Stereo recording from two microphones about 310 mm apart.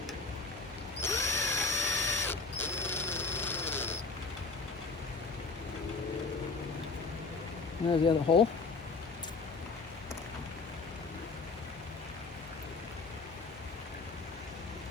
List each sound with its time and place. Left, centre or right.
1.0 s drill: centre
8.0 s speech: centre